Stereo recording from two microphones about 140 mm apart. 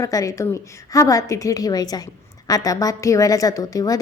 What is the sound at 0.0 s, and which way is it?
A woman's voice, 25° left (ahead or behind).